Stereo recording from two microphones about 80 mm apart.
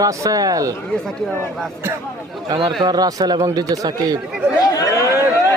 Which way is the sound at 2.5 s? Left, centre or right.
Right.